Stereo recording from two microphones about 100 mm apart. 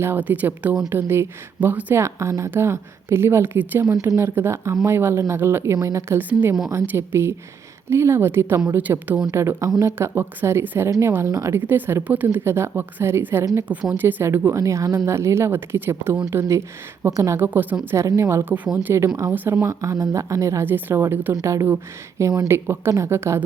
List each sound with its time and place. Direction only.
0.0 s speech: 20° right (ahead or behind)
13.9 s speech: 20° right (ahead or behind)
17.3 s speech: 20° right (ahead or behind); by 22.4 s 40° right (ahead or behind)
22.4 s speech: 25° right (ahead or behind)